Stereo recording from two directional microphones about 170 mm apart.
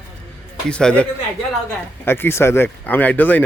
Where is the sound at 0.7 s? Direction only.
5° left (ahead or behind).